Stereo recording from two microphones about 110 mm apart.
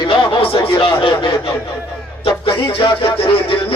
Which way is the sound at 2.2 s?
50° left (ahead or behind).